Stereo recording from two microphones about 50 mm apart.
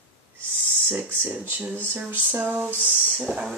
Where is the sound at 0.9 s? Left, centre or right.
Right.